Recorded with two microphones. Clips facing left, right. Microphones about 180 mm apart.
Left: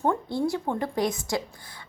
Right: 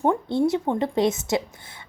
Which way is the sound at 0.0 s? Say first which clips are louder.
Right 4 dB; 20° right (ahead or behind).